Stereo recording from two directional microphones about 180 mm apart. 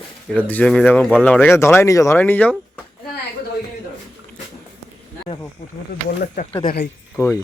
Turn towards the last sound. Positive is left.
turn(degrees=15)  # may be behind; listen again after turning